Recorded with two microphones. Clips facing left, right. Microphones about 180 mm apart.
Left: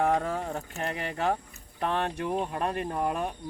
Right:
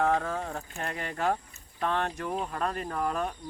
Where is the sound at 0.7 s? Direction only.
5° left (ahead or behind); by 3.1 s 25° left (ahead or behind).